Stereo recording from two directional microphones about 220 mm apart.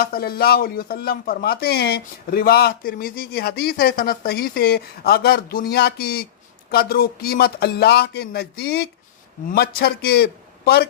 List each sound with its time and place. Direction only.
0.0 s speech: 45° left (ahead or behind)